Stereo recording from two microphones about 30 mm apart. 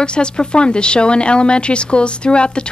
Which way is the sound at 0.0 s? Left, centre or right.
Left.